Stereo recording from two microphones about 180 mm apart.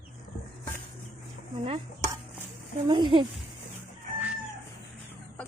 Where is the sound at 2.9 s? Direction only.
30° right (ahead or behind).